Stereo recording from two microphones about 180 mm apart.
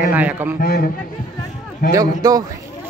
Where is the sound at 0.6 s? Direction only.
60° left (ahead or behind).